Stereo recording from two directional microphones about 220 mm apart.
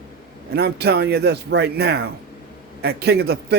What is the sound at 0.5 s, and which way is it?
Speech, 45° right (ahead or behind).